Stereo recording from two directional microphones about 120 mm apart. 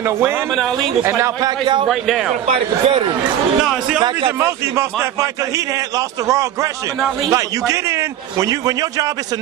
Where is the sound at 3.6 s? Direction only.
5° right (ahead or behind).